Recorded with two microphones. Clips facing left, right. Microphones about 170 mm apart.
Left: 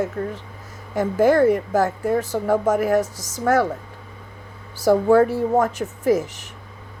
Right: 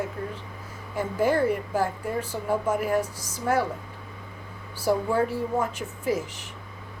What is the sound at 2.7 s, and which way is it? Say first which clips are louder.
Speech: left 6 dB; 45° left (ahead or behind).